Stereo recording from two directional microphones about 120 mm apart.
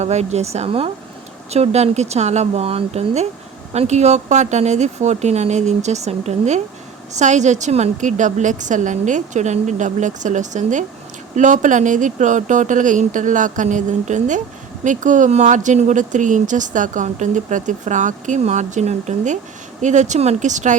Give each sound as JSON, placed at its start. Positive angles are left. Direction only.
{"t": 0.0, "sound": "speech", "side_deg": -65}
{"t": 7.2, "sound": "speech", "side_deg": -80}